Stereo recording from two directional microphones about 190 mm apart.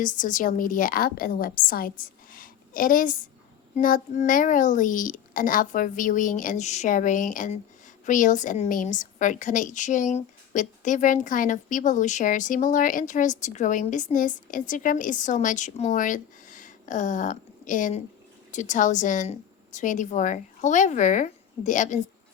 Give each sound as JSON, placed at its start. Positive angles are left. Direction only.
{"t": 0.0, "sound": "a child's voice", "side_deg": 45}